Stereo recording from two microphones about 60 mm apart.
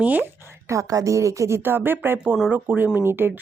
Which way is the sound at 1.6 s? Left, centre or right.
Right.